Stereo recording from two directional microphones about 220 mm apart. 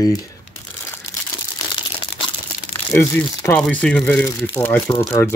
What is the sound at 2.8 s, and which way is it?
Speech, 10° left (ahead or behind).